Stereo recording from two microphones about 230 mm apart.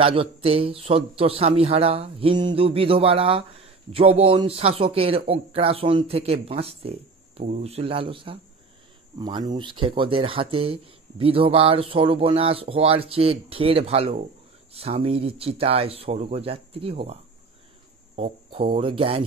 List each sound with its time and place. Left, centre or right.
0.0 s speech: right